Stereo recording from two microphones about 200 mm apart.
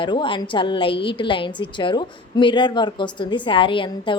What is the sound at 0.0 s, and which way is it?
A woman's voice, 25° left (ahead or behind).